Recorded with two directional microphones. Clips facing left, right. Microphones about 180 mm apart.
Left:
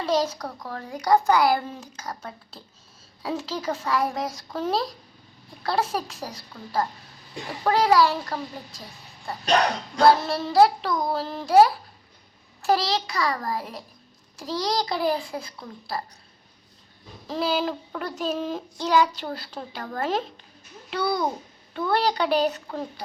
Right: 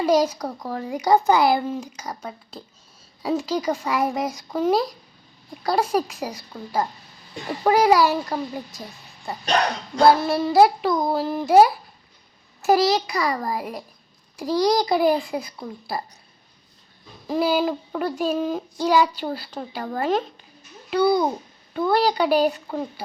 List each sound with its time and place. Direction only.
0.0 s speech: 15° right (ahead or behind)
1.6 s speech: 10° right (ahead or behind)
3.2 s speech: 10° right (ahead or behind)
17.2 s a woman's voice: 10° right (ahead or behind)
21.0 s speech: 20° right (ahead or behind)
21.9 s a woman's voice: 5° right (ahead or behind)